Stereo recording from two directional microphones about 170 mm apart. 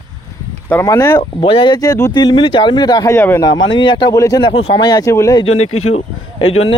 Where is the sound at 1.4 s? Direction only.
30° left (ahead or behind).